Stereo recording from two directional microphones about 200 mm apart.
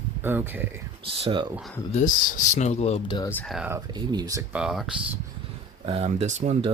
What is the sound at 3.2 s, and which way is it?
Speech, 10° left (ahead or behind).